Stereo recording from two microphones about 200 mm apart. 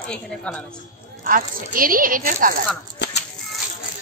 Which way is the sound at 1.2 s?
45° right (ahead or behind).